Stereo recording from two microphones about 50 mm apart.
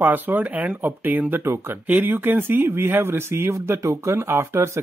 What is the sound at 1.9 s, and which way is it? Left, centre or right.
Speech, right.